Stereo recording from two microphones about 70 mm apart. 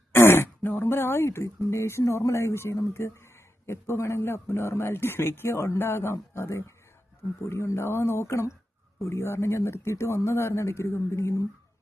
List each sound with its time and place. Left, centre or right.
0.1 s speech: left